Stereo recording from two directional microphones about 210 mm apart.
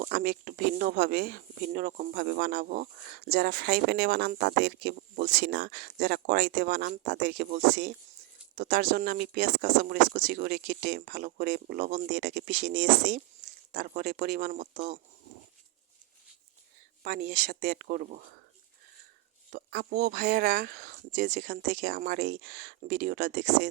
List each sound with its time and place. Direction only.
0.0 s speech: 45° right (ahead or behind)
17.0 s speech: 45° right (ahead or behind)
19.5 s speech: 40° right (ahead or behind)